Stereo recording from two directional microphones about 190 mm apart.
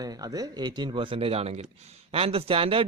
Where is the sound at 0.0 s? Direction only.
20° right (ahead or behind).